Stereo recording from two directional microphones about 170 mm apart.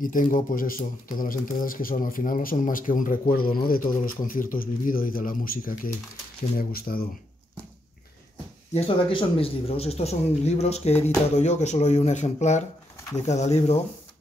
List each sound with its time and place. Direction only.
0.0 s speech: 50° left (ahead or behind)
8.7 s speech: 35° left (ahead or behind)